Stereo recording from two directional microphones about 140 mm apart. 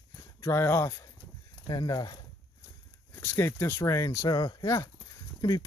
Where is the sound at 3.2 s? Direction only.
15° left (ahead or behind).